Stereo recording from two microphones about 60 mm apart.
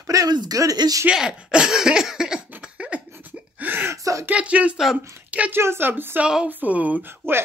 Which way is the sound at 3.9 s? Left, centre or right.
Right.